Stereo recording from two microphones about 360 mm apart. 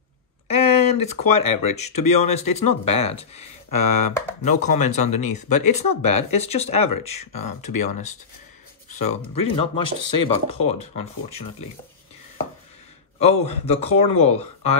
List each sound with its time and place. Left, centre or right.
0.5 s a sound: centre
1.4 s speech: centre
4.1 s speech: centre
4.5 s speech: centre
13.2 s speech: centre
13.9 s speech: left
14.2 s speech: centre